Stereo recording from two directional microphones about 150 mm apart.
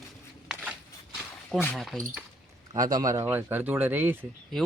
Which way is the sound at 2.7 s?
25° right (ahead or behind).